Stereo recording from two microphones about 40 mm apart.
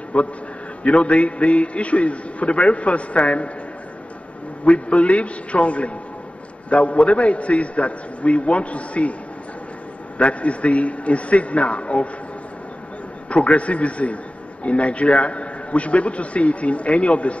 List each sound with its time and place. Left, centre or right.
0.1 s a man's voice: left
4.6 s a man's voice: left
10.1 s a man's voice: left
13.3 s a man's voice: left